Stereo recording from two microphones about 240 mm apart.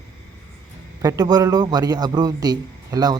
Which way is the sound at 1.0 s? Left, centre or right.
Centre.